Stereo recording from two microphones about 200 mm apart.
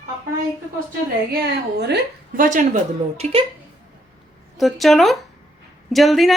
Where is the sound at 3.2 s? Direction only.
25° right (ahead or behind).